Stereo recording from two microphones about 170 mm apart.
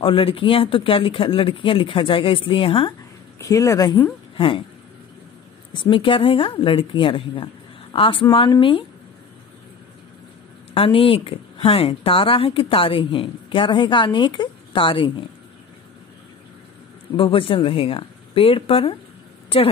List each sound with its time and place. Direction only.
0.0 s a woman's voice: 30° left (ahead or behind)
3.3 s a woman's voice: 20° left (ahead or behind)
5.7 s a woman's voice: 30° left (ahead or behind)
10.7 s a woman's voice: 35° left (ahead or behind)
17.2 s a woman's voice: 30° left (ahead or behind)